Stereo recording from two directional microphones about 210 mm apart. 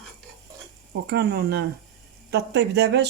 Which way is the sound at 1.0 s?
55° right (ahead or behind).